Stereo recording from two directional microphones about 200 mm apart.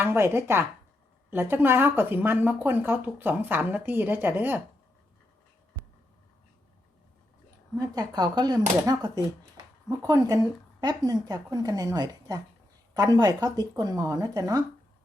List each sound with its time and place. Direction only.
0.0 s speech: 10° right (ahead or behind)
7.8 s speech: 20° right (ahead or behind)